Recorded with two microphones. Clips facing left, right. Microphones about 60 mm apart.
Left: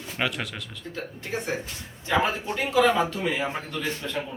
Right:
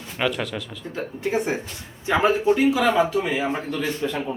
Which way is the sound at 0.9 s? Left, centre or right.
Centre.